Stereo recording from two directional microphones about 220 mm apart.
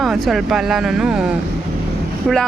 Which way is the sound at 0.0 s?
Centre (ahead or behind).